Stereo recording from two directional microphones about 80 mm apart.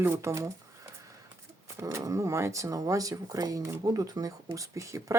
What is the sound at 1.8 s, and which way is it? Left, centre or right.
Speech, right.